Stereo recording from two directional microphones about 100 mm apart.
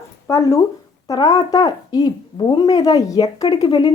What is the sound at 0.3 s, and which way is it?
A woman's voice, 30° left (ahead or behind).